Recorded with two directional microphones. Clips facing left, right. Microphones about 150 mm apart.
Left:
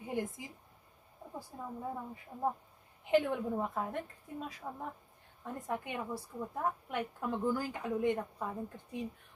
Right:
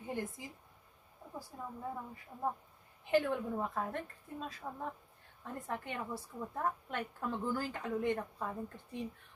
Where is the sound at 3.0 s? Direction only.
20° left (ahead or behind).